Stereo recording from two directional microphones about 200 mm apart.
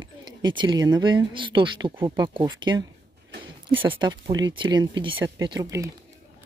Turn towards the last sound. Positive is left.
turn(degrees=-15)  # may be behind; listen again after turning